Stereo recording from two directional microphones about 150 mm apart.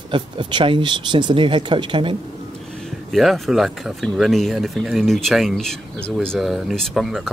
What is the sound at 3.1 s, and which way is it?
Speech, centre (ahead or behind).